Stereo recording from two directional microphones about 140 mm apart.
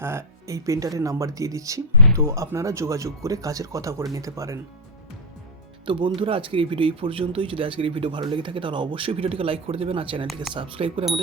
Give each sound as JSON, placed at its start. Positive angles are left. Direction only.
{"t": 0.0, "sound": "speech", "side_deg": -20}
{"t": 5.8, "sound": "speech", "side_deg": -35}